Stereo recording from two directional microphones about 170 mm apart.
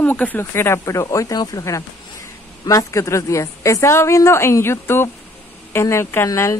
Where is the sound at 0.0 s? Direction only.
10° left (ahead or behind).